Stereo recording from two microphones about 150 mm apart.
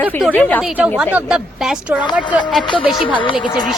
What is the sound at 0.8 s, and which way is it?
A woman's voice, 10° right (ahead or behind).